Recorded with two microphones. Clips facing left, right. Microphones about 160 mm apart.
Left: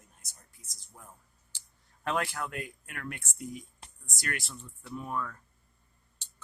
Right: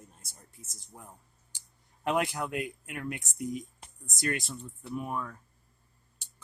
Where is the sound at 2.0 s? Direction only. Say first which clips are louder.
Right 3 dB; 15° right (ahead or behind).